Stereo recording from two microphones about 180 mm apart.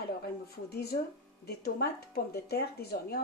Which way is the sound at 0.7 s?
60° left (ahead or behind).